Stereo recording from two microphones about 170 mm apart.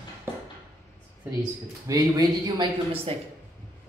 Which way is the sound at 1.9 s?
20° right (ahead or behind).